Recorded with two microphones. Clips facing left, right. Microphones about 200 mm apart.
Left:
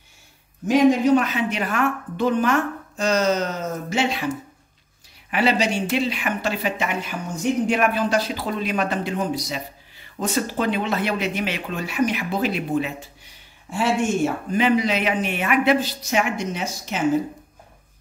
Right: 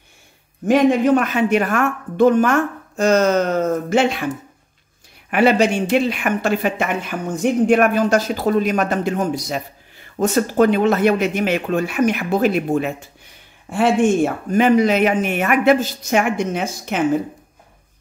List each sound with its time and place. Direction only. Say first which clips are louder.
0.7 s speech: right 2 dB; 55° right (ahead or behind)
5.3 s speech: right 6 dB; 50° right (ahead or behind)